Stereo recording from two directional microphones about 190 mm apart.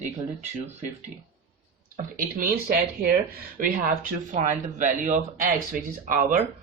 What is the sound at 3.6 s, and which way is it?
Speech, 45° right (ahead or behind).